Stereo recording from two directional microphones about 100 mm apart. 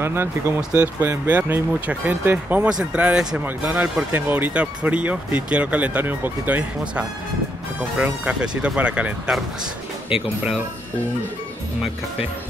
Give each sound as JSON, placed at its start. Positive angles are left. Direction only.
{"t": 0.0, "sound": "speech", "side_deg": -25}
{"t": 8.3, "sound": "speech", "side_deg": -10}